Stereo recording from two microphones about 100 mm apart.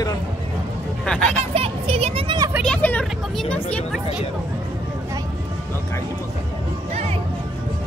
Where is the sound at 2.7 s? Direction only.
15° left (ahead or behind).